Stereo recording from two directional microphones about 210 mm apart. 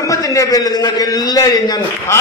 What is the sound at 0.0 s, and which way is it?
A man's voice, 15° left (ahead or behind).